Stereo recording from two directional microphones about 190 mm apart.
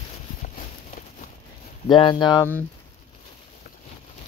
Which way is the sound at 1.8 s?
25° left (ahead or behind).